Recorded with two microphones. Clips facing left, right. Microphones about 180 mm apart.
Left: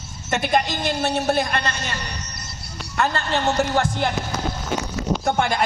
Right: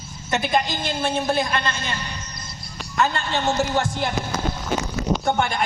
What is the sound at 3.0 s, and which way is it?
Speech, 55° left (ahead or behind).